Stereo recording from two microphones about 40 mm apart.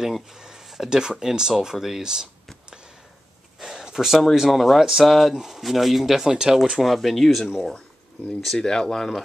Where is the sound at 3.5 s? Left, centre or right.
Centre.